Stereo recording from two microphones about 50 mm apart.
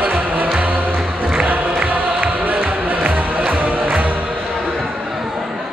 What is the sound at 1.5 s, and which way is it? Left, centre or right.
Music, right.